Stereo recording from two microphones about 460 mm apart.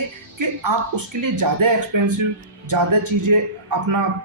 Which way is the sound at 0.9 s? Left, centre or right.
Right.